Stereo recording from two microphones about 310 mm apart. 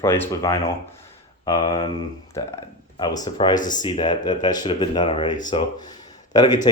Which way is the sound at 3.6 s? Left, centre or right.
Left.